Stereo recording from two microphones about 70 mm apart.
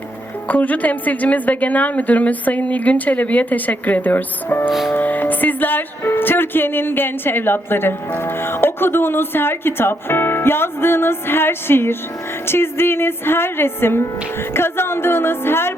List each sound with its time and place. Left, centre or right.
0.4 s a woman's voice: left